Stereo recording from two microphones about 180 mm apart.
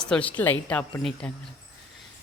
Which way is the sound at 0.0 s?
5° left (ahead or behind).